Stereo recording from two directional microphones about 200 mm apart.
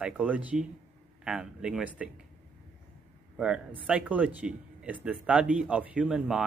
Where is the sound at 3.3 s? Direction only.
5° right (ahead or behind).